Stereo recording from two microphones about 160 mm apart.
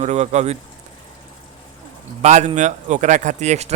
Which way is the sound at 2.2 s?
45° right (ahead or behind).